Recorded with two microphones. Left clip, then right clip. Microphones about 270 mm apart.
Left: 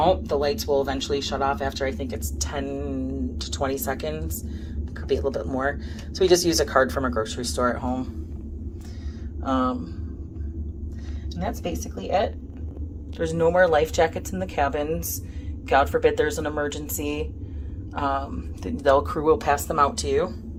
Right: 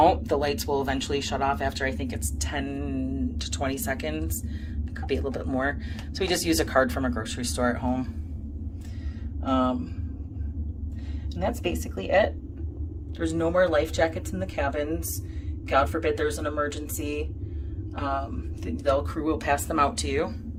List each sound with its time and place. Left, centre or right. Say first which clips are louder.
0.3 s speech: left 4 dB; centre
7.8 s speech: left 1 dB; centre
9.4 s speech: left 1 dB; centre
11.9 s speech: right 1 dB; centre